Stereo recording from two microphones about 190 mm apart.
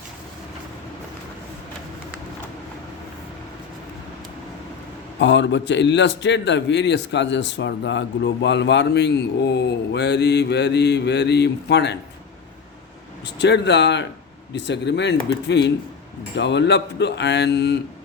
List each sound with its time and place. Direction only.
5.2 s a man's voice: 70° left (ahead or behind)
13.2 s speech: 65° left (ahead or behind)